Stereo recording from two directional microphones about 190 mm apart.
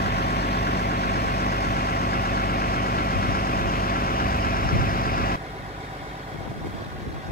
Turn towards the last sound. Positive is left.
turn(degrees=50)  # may be behind; listen again after turning